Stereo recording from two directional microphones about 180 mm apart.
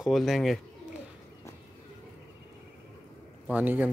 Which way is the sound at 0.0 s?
Centre (ahead or behind).